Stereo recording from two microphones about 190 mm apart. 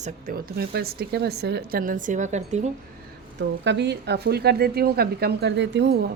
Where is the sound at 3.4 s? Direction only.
65° right (ahead or behind).